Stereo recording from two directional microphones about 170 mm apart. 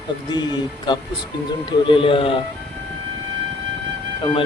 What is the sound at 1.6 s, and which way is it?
Speech, 30° left (ahead or behind).